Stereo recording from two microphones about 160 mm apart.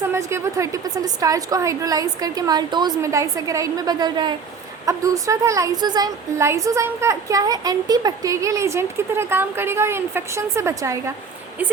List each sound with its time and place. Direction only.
0.0 s a woman's voice: 15° right (ahead or behind)